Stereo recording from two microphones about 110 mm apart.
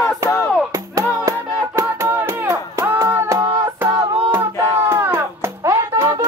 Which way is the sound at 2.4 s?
20° right (ahead or behind).